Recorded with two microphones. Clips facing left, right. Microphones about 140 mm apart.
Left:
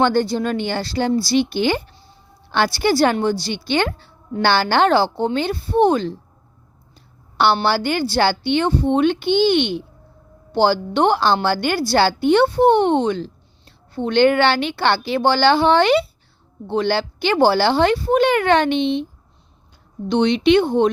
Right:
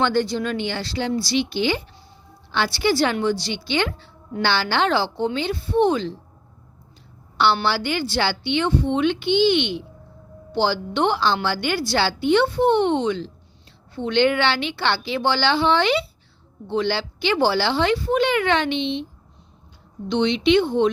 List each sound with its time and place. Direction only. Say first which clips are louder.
0.0 s a woman's voice: left 4 dB; 45° left (ahead or behind)
7.6 s a woman's voice: left 4 dB; 45° left (ahead or behind)
20.1 s a woman's voice: left 3 dB; 50° left (ahead or behind)